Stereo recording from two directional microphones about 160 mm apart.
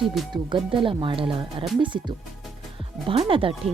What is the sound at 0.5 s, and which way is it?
Speech, 30° right (ahead or behind).